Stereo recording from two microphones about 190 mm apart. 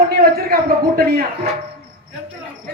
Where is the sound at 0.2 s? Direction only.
50° right (ahead or behind).